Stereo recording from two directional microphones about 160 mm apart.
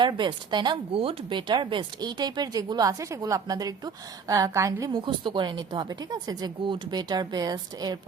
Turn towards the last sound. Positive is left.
turn(degrees=-25)  # may be behind; listen again after turning